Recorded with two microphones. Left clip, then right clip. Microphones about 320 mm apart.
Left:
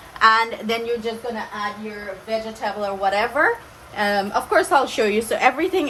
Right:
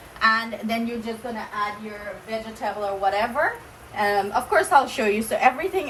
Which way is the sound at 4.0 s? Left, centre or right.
Left.